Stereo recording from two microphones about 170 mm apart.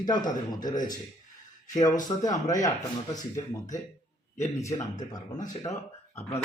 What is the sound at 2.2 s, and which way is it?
Speech, 20° left (ahead or behind).